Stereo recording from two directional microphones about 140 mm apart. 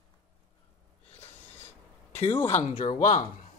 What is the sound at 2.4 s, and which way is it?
Speech, 55° left (ahead or behind).